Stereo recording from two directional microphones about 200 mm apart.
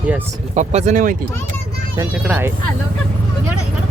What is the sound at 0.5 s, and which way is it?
Speech, 35° right (ahead or behind).